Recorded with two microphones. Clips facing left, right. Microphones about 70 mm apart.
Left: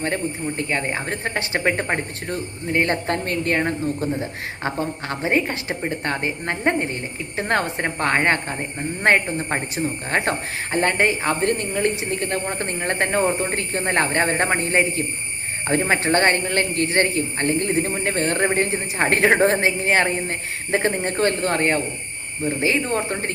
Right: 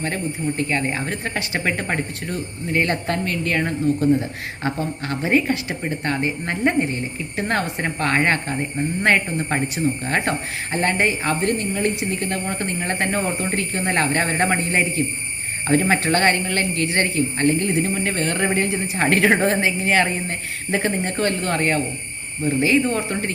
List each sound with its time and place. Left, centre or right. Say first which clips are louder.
0.0 s speech: even; left
15.6 s speech: right 2 dB; left